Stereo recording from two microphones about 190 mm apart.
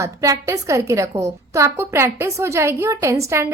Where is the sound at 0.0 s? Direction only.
15° right (ahead or behind).